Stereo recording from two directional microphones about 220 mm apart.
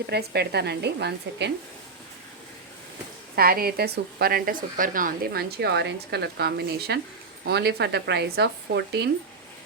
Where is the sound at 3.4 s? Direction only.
45° right (ahead or behind).